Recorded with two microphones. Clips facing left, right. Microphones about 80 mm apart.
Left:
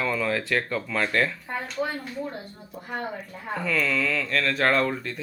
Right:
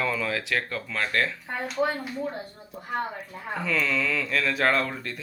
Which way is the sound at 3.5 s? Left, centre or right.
Centre.